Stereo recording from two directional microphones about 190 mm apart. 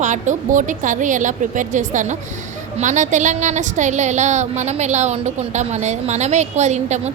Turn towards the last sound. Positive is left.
turn(degrees=-35)  # may be behind; listen again after turning